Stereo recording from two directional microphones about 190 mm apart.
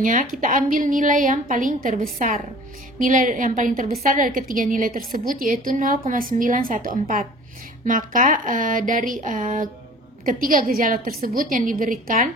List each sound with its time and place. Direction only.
0.0 s a woman's voice: 45° right (ahead or behind)